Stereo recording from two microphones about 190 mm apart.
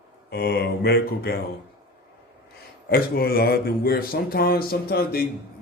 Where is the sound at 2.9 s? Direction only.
55° left (ahead or behind).